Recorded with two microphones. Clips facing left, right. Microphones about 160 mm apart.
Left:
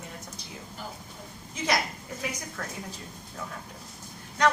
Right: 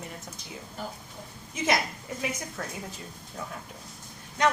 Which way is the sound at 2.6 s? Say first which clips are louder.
Left 1 dB; 25° right (ahead or behind).